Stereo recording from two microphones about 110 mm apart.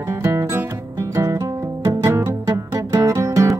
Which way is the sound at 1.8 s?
30° right (ahead or behind).